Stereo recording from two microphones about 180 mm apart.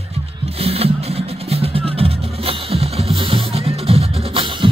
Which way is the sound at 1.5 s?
30° right (ahead or behind).